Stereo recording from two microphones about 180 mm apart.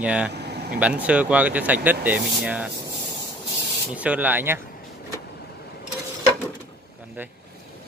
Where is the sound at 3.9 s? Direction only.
10° right (ahead or behind).